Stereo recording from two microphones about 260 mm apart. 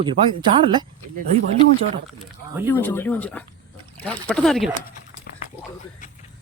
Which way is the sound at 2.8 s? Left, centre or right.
Centre.